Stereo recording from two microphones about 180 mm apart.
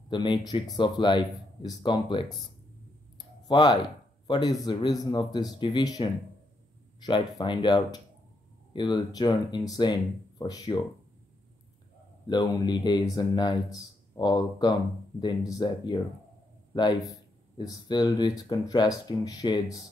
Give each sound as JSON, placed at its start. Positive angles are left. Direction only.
{"t": 0.1, "sound": "speech", "side_deg": 25}
{"t": 3.2, "sound": "a sound", "side_deg": 25}
{"t": 4.3, "sound": "speech", "side_deg": 25}
{"t": 12.3, "sound": "a man's voice", "side_deg": 25}